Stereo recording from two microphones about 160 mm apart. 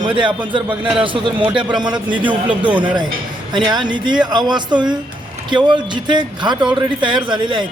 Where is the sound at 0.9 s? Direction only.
30° right (ahead or behind).